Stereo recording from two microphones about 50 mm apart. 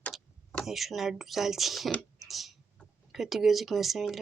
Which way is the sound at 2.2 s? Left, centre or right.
Centre.